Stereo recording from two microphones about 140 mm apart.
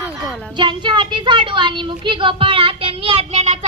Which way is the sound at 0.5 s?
35° right (ahead or behind).